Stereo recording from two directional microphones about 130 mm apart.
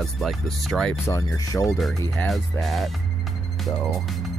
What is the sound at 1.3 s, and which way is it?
Music, 25° left (ahead or behind).